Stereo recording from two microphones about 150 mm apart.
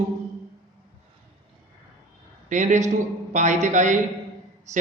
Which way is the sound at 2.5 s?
55° right (ahead or behind).